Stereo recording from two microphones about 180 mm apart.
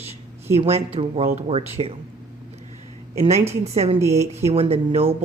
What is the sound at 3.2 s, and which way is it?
Speech, 35° right (ahead or behind).